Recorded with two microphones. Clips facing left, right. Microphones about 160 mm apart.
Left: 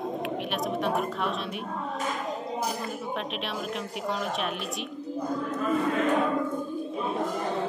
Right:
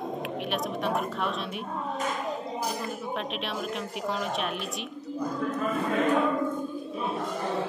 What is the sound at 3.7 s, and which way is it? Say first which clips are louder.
Music: even; centre (ahead or behind).